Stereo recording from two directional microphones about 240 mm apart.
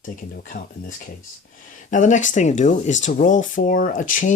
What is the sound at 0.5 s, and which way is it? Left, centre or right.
Speech, left.